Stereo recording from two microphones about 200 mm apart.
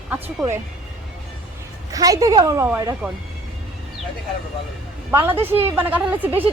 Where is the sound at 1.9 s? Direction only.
15° right (ahead or behind).